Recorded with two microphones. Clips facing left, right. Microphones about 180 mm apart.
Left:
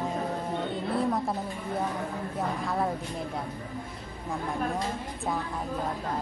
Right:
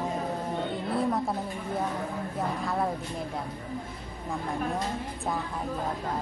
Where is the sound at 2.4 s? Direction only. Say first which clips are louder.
Even; centre (ahead or behind).